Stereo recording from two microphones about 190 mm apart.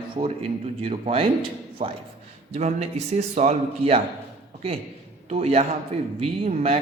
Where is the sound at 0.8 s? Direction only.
30° right (ahead or behind).